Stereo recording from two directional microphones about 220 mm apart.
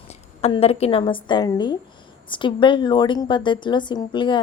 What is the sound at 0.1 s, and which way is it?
A woman's voice, 25° left (ahead or behind).